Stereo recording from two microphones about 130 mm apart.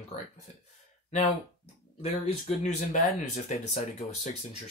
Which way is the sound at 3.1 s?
70° left (ahead or behind).